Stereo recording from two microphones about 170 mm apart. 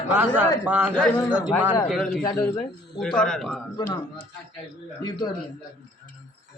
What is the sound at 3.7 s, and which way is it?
Speech, 25° left (ahead or behind).